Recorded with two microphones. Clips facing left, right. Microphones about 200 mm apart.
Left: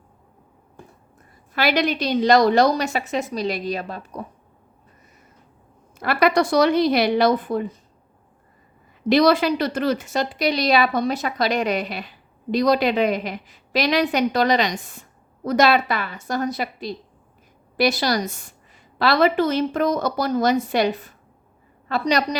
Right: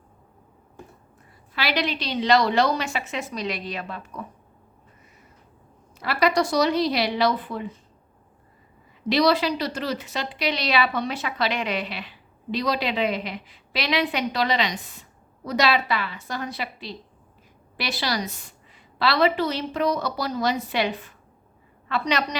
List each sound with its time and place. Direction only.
1.5 s a woman's voice: 45° left (ahead or behind)
6.0 s speech: 55° left (ahead or behind)
9.0 s a woman's voice: 50° left (ahead or behind)